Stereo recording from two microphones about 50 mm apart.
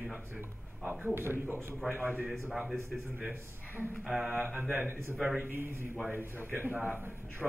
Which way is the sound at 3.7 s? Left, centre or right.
Left.